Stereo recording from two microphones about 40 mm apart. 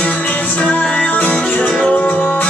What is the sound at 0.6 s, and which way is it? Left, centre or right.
Music, left.